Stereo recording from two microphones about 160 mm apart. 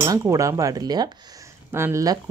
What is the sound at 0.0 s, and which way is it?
Speech, 20° right (ahead or behind).